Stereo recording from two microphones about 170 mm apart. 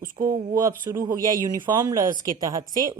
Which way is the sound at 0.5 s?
20° right (ahead or behind).